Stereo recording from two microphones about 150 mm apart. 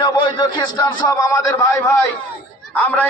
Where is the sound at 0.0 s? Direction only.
30° left (ahead or behind).